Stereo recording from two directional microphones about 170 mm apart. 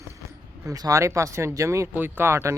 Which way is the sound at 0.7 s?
20° right (ahead or behind).